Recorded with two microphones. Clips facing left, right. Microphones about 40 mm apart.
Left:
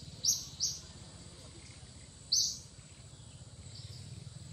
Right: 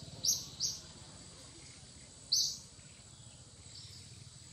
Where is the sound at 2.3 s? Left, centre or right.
Centre.